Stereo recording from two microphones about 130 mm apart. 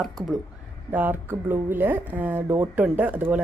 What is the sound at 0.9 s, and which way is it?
Speech, 15° right (ahead or behind).